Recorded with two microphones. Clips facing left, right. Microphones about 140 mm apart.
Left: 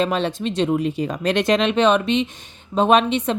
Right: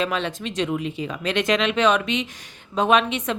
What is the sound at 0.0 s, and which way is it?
Speech, 35° left (ahead or behind).